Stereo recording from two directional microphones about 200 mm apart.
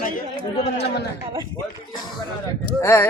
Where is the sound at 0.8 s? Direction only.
55° left (ahead or behind).